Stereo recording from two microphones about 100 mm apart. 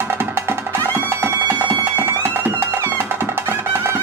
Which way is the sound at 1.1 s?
25° right (ahead or behind).